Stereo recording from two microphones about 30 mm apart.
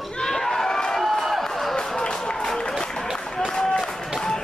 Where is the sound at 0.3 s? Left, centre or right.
Centre.